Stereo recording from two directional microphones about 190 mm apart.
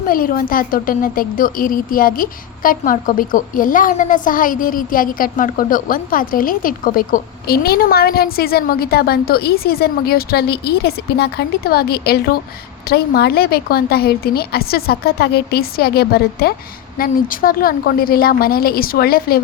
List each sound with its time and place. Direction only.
0.1 s a woman's voice: 50° left (ahead or behind)